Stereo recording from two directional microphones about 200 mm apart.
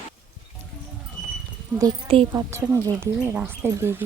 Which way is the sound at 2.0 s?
30° right (ahead or behind).